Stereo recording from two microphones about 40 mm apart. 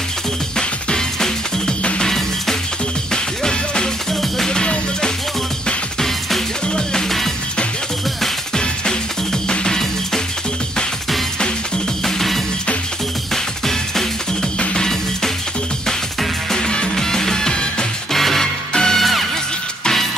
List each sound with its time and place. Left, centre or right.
0.6 s music: centre
4.5 s music: centre
6.7 s music: centre
9.5 s music: centre
13.3 s music: centre
16.5 s music: centre
18.1 s music: centre
18.7 s music: centre
18.9 s music: centre